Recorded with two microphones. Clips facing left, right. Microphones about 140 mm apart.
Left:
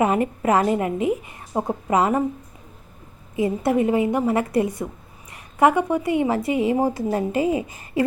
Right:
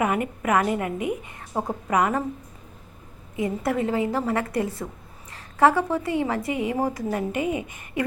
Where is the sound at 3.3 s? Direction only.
25° left (ahead or behind).